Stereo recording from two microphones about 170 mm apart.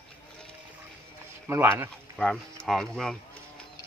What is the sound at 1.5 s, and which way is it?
Speech, 15° right (ahead or behind).